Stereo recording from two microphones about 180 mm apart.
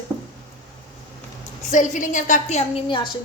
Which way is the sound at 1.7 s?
45° left (ahead or behind).